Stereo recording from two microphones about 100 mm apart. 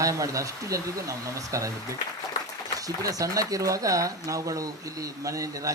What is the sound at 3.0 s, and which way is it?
Speech, 35° right (ahead or behind).